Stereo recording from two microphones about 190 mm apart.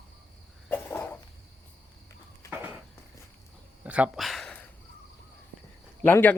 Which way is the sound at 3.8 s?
5° right (ahead or behind).